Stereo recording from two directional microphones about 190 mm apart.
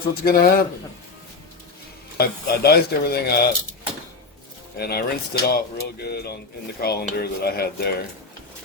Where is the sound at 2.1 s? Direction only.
55° left (ahead or behind).